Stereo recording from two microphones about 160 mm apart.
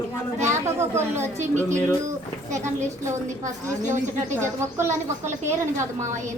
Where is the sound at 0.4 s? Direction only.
15° right (ahead or behind).